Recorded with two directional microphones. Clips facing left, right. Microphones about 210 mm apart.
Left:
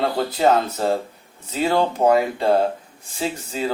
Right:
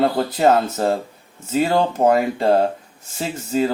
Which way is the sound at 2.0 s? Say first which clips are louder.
Right 1 dB; 40° right (ahead or behind).